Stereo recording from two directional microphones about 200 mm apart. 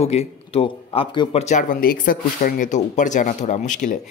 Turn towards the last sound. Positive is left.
turn(degrees=40)  # may be behind; listen again after turning